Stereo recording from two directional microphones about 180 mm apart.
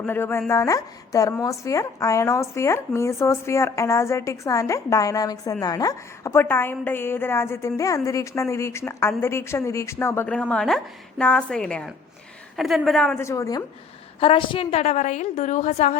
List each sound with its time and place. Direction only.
0.0 s a woman's voice: 10° left (ahead or behind)
14.2 s a woman's voice: 30° left (ahead or behind)